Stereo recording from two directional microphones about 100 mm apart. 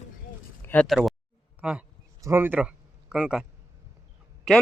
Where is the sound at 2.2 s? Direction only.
25° right (ahead or behind); by 3.4 s 10° right (ahead or behind).